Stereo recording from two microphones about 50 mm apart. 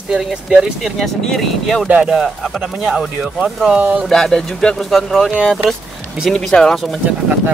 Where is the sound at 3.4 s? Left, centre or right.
Right.